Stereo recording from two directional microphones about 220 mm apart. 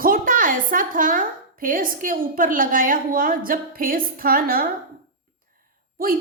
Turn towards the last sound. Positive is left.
turn(degrees=-40)  # may be behind; listen again after turning